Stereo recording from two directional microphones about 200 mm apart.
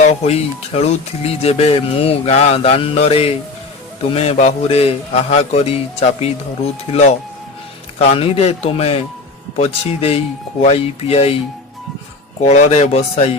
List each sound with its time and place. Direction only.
0.0 s speech: 35° left (ahead or behind)
12.4 s speech: 35° left (ahead or behind)